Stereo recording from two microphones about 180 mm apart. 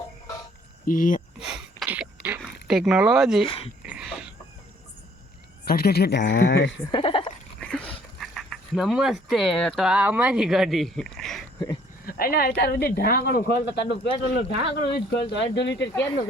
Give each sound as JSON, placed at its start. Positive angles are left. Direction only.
{"t": 0.9, "sound": "speech", "side_deg": 50}
{"t": 1.4, "sound": "sneeze", "side_deg": -5}
{"t": 2.4, "sound": "speech", "side_deg": 0}
{"t": 3.4, "sound": "speech", "side_deg": 30}
{"t": 3.8, "sound": "a sound", "side_deg": -5}
{"t": 5.6, "sound": "speech", "side_deg": 60}
{"t": 6.4, "sound": "speech", "side_deg": 65}
{"t": 6.9, "sound": "a sound", "side_deg": 30}
{"t": 7.6, "sound": "dog", "side_deg": 5}
{"t": 8.2, "sound": "speech", "side_deg": 0}
{"t": 12.0, "sound": "speech", "side_deg": 55}